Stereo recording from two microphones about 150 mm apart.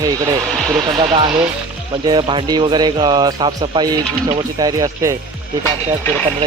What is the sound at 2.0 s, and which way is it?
Speech, 30° right (ahead or behind).